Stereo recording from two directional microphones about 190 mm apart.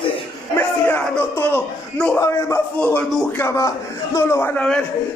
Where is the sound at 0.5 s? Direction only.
10° left (ahead or behind).